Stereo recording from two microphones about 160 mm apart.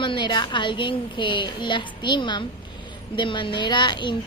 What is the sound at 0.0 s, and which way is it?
Speech, 30° left (ahead or behind).